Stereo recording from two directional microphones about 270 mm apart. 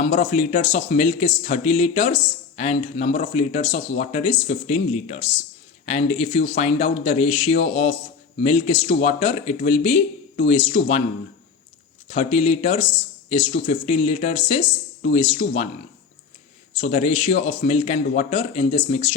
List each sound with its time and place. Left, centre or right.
0.0 s speech: left
12.0 s speech: left
16.7 s speech: left